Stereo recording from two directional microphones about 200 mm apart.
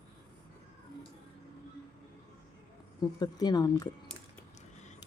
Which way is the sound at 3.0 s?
20° left (ahead or behind).